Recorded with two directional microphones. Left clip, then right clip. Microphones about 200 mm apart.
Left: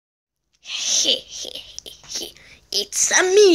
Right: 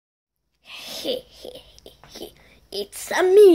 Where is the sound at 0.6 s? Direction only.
10° right (ahead or behind).